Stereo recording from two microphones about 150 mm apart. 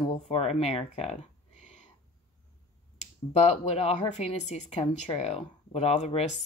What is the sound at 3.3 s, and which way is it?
A woman's voice, 45° left (ahead or behind).